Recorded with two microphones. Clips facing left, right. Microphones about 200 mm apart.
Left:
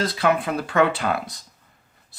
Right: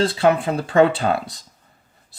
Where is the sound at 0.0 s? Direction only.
30° right (ahead or behind).